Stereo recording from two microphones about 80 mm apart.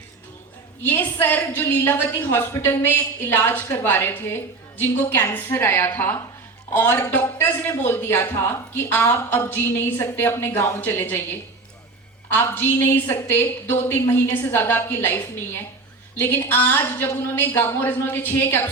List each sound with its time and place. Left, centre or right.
0.8 s a woman's voice: left